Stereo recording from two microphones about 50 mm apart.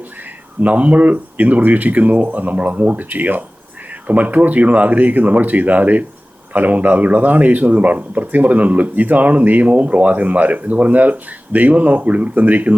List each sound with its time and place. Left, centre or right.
0.6 s speech: right